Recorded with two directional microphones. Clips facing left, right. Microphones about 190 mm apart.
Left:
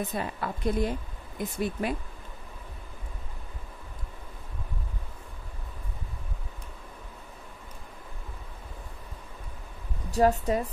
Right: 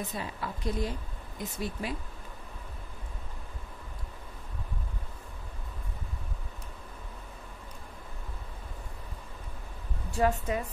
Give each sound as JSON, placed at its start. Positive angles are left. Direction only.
{"t": 0.1, "sound": "a woman's voice", "side_deg": 55}
{"t": 10.1, "sound": "a woman's voice", "side_deg": 40}